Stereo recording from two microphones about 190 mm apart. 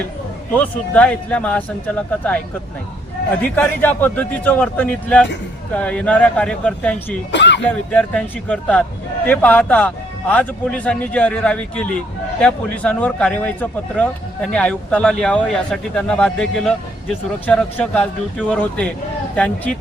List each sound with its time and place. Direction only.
0.5 s a man's voice: 5° left (ahead or behind)
3.5 s a man's voice: 10° left (ahead or behind)
7.3 s speech: 65° left (ahead or behind)
7.7 s a man's voice: 5° left (ahead or behind)